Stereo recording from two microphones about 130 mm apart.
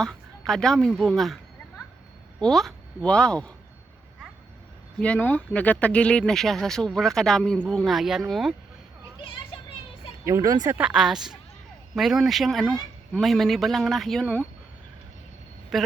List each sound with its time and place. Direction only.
0.0 s speech: 5° left (ahead or behind)
2.4 s speech: centre (ahead or behind)
4.9 s speech: 10° left (ahead or behind)
9.1 s children playing: 40° left (ahead or behind)
10.2 s speech: 25° right (ahead or behind)
10.8 s speech: 5° right (ahead or behind)
15.7 s speech: centre (ahead or behind)